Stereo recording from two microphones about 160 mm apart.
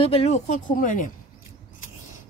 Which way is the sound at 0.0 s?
40° left (ahead or behind).